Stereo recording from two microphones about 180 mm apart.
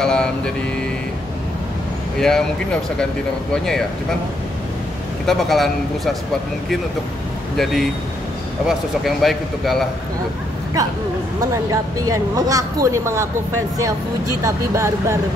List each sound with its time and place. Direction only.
0.0 s speech: 5° left (ahead or behind)
2.1 s speech: 5° left (ahead or behind)
5.2 s speech: centre (ahead or behind)
7.5 s speech: centre (ahead or behind)
11.5 s speech: 20° right (ahead or behind)
14.4 s speech: 15° right (ahead or behind)